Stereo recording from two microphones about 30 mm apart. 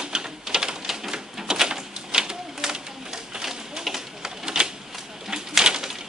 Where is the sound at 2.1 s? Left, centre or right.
Right.